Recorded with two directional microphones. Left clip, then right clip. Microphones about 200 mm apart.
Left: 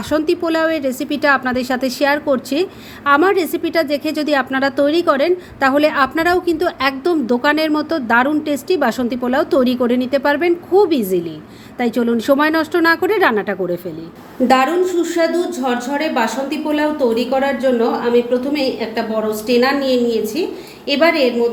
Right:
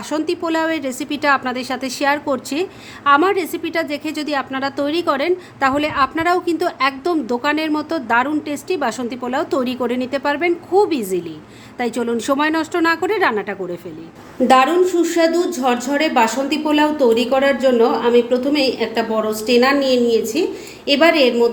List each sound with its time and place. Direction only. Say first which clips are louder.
0.1 s a woman's voice: left 3 dB; 5° left (ahead or behind)
14.4 s a woman's voice: right 1 dB; 10° right (ahead or behind)